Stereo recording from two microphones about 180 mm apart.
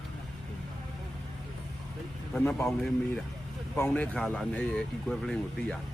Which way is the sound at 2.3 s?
10° left (ahead or behind).